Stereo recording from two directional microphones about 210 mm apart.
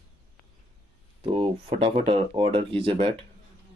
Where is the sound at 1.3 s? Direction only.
25° right (ahead or behind).